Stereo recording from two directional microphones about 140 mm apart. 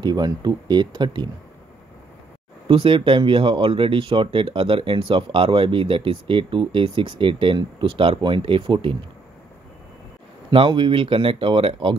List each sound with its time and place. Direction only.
0.0 s speech: 30° right (ahead or behind)
2.7 s speech: 40° right (ahead or behind)
10.5 s speech: 40° right (ahead or behind)